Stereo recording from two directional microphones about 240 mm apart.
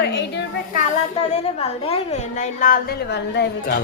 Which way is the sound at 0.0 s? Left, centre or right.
Left.